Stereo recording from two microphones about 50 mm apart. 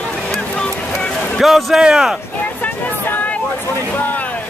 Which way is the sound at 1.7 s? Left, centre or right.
Centre.